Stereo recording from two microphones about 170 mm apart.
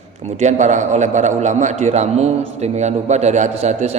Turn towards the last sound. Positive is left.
turn(degrees=-40)  # may be behind; listen again after turning